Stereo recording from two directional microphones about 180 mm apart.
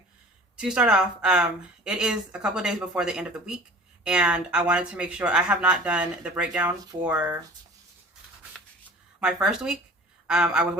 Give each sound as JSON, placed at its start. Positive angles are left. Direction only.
{"t": 0.5, "sound": "a woman's voice", "side_deg": -5}
{"t": 9.2, "sound": "a woman's voice", "side_deg": -5}